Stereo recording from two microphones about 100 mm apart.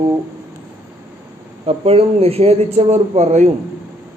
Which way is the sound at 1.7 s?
90° right.